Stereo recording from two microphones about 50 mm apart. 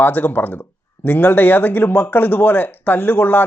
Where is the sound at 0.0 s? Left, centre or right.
Left.